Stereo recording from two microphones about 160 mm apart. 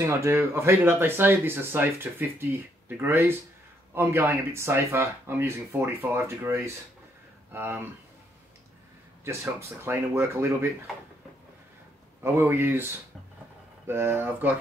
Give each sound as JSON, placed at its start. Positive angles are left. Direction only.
{"t": 0.0, "sound": "speech", "side_deg": -15}
{"t": 9.2, "sound": "speech", "side_deg": -15}
{"t": 12.2, "sound": "speech", "side_deg": -15}